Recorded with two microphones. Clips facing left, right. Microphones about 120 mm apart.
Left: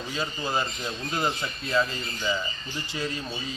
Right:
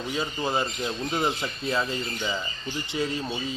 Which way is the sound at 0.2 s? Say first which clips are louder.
Right 1 dB; 25° right (ahead or behind).